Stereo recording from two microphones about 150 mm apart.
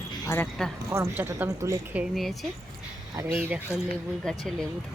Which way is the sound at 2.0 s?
Centre (ahead or behind).